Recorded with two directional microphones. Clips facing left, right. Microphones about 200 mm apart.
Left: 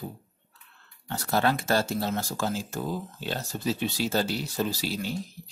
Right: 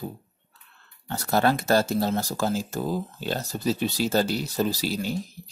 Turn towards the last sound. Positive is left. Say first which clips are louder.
# right 3 dB
turn(degrees=-40)  # may be behind; listen again after turning